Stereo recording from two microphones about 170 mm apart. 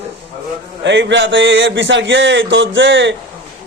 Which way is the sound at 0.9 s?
90° right.